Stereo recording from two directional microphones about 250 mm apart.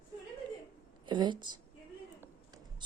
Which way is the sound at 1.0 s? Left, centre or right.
Centre.